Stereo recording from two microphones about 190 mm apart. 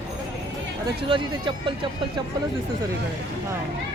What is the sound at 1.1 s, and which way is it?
Speech, 25° right (ahead or behind).